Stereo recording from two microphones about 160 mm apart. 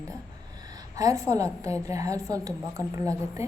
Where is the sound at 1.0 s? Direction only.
20° right (ahead or behind).